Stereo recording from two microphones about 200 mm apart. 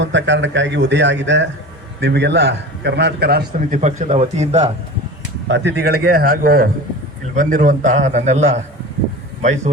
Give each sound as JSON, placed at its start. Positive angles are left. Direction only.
{"t": 0.0, "sound": "a man's voice", "side_deg": -65}
{"t": 3.8, "sound": "a man's voice", "side_deg": -35}
{"t": 5.5, "sound": "a man's voice", "side_deg": -60}